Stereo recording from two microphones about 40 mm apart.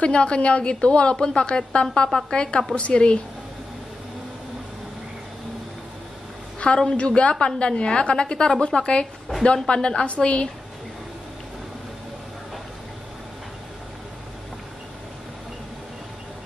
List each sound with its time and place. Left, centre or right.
0.0 s a woman's voice: left
7.0 s a woman's voice: left